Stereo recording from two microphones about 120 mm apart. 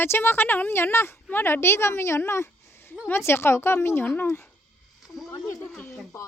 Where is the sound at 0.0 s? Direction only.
20° left (ahead or behind).